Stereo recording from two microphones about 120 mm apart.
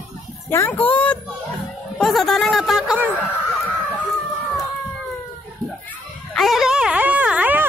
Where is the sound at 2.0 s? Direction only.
5° left (ahead or behind).